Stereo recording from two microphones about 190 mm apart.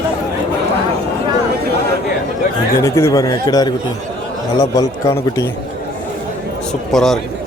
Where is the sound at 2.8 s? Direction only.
15° left (ahead or behind).